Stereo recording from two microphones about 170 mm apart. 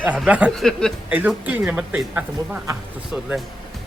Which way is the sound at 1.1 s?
10° right (ahead or behind).